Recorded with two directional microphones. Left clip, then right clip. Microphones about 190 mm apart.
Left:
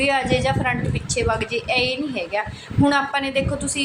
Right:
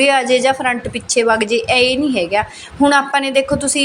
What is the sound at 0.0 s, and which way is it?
A woman's voice, 25° right (ahead or behind).